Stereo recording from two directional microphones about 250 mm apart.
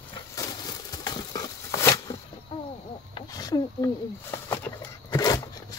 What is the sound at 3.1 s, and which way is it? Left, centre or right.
Wild animals, centre.